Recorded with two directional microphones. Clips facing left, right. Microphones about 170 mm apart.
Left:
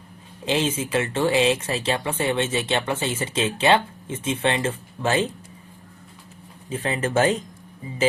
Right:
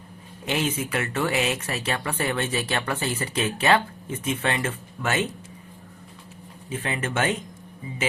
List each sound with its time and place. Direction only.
0.4 s speech: 25° left (ahead or behind)
6.7 s speech: 35° left (ahead or behind)